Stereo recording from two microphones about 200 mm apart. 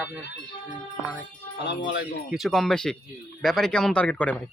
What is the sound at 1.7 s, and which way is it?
Speech, 65° left (ahead or behind).